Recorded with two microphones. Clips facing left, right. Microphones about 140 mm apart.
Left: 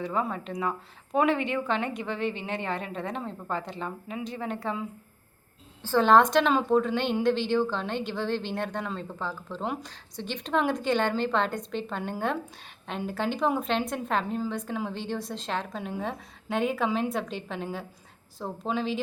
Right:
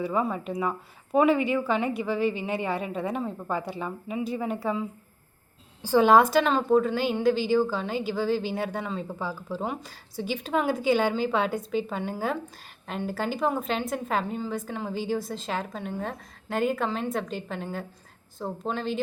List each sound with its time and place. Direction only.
0.0 s speech: 5° right (ahead or behind)
5.8 s a woman's voice: 10° right (ahead or behind)